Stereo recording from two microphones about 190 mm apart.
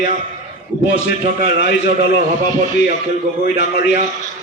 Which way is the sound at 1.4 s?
35° right (ahead or behind).